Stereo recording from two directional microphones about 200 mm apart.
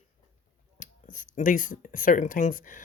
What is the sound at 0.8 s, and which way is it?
Speech, 40° left (ahead or behind).